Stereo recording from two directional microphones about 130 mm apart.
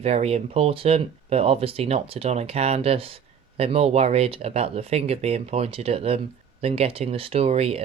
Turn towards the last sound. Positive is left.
turn(degrees=-50)  # may be behind; listen again after turning